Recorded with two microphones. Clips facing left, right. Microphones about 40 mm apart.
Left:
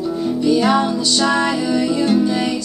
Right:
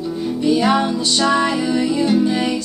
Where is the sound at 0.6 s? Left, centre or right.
Centre.